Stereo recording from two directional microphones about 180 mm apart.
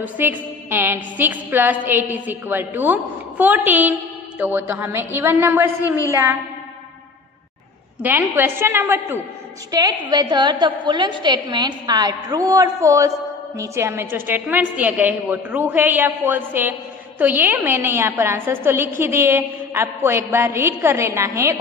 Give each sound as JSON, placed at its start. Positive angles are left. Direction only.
{"t": 0.0, "sound": "a woman's voice", "side_deg": -10}
{"t": 8.0, "sound": "a woman's voice", "side_deg": -10}